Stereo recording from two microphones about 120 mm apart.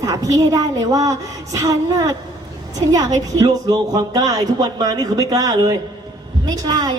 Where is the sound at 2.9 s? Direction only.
30° right (ahead or behind).